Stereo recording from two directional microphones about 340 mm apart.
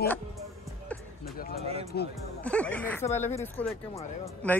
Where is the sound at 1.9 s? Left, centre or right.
Left.